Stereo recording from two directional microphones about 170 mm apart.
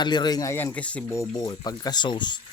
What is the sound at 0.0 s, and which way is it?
Speech, 25° left (ahead or behind).